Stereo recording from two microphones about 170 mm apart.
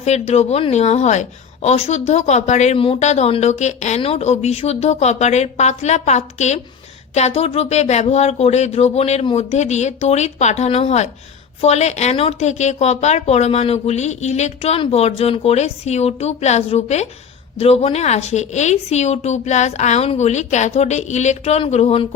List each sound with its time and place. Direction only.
0.0 s a woman's voice: 40° left (ahead or behind)